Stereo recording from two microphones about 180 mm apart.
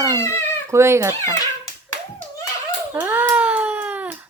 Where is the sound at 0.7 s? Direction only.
15° right (ahead or behind).